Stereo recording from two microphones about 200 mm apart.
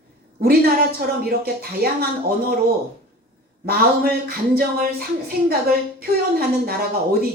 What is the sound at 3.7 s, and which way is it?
Speech, 50° right (ahead or behind).